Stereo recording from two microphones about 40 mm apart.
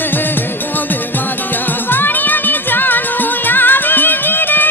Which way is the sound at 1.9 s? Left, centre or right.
Left.